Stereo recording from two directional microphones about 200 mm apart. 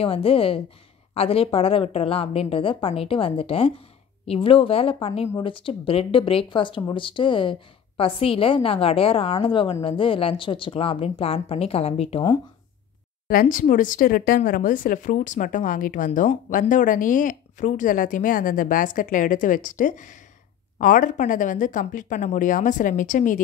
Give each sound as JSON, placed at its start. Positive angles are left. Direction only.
{"t": 0.0, "sound": "a woman's voice", "side_deg": 30}
{"t": 13.3, "sound": "speech", "side_deg": 45}